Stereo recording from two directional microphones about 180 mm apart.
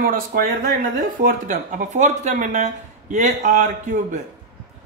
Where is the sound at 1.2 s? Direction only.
50° right (ahead or behind).